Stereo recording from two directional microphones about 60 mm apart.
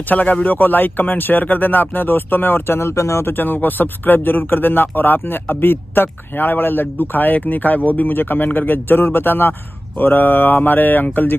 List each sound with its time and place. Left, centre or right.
0.1 s speech: left
3.0 s speech: left
3.3 s speech: left